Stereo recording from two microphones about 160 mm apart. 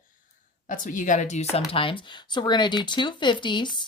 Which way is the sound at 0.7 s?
55° left (ahead or behind).